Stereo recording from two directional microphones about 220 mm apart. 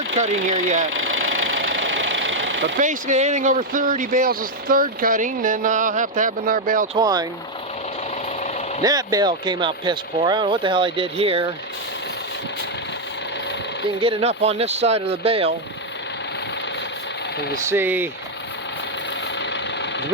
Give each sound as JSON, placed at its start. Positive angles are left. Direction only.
{"t": 0.4, "sound": "speech", "side_deg": -35}
{"t": 0.9, "sound": "engine", "side_deg": -65}
{"t": 2.7, "sound": "speech", "side_deg": -35}
{"t": 6.9, "sound": "speech", "side_deg": -15}
{"t": 8.8, "sound": "speech", "side_deg": -15}
{"t": 14.0, "sound": "speech", "side_deg": -25}
{"t": 17.7, "sound": "speech", "side_deg": -10}